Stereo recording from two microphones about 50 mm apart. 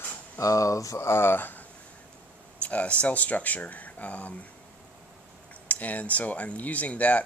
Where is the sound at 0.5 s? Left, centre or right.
Left.